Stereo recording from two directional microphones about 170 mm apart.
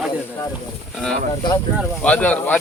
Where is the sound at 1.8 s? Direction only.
5° left (ahead or behind).